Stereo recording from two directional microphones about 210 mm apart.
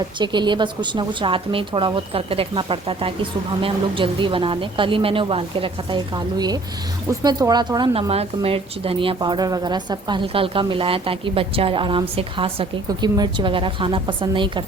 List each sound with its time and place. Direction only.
0.2 s a woman's voice: 20° right (ahead or behind)